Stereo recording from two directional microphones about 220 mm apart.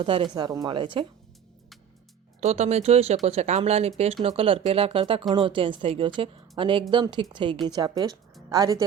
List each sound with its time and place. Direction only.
0.0 s speech: 25° right (ahead or behind)
2.4 s a woman's voice: 30° right (ahead or behind)